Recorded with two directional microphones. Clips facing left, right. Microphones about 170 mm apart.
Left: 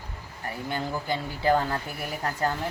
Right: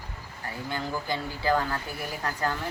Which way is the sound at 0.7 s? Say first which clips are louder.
Left 1 dB; 25° left (ahead or behind).